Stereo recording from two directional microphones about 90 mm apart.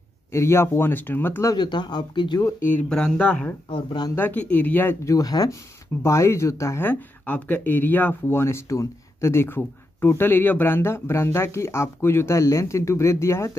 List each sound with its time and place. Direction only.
0.3 s speech: 30° left (ahead or behind)
1.6 s speech: 55° left (ahead or behind)
2.4 s speech: 20° left (ahead or behind)
2.9 s speech: 10° left (ahead or behind)
3.7 s speech: 55° left (ahead or behind)
4.1 s speech: 20° left (ahead or behind)
5.0 s speech: 45° left (ahead or behind)
6.0 s speech: 30° left (ahead or behind)